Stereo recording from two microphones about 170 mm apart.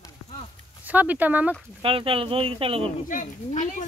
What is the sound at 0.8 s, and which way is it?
Speech, 10° right (ahead or behind).